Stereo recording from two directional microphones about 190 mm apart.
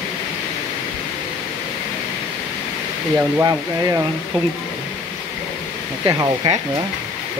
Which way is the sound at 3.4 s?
15° right (ahead or behind).